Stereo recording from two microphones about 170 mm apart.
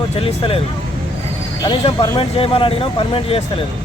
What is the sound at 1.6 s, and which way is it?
Speech, 25° left (ahead or behind).